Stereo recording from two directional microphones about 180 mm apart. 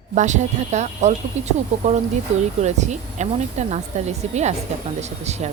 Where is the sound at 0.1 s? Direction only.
40° right (ahead or behind).